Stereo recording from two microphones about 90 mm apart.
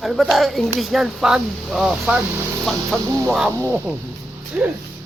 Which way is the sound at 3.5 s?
25° right (ahead or behind).